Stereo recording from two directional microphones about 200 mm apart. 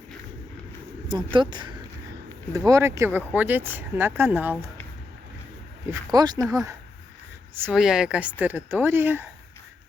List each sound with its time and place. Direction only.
1.0 s speech: 25° right (ahead or behind)
5.9 s speech: 20° right (ahead or behind)
7.5 s speech: 5° right (ahead or behind)